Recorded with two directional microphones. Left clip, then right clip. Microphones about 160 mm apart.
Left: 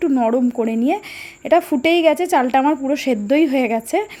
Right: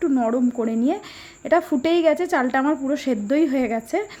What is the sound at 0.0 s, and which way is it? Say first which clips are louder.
A woman's voice: left 4 dB; 15° left (ahead or behind).